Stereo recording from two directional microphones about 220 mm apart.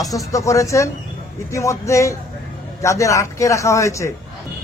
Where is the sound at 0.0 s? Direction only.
15° left (ahead or behind).